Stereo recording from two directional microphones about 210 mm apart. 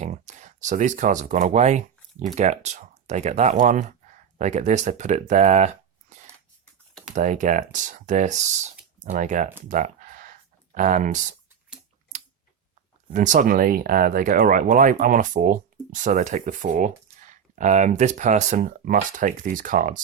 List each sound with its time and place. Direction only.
0.0 s speech: 35° right (ahead or behind)
9.6 s a sound: 40° right (ahead or behind)
13.1 s speech: 35° right (ahead or behind)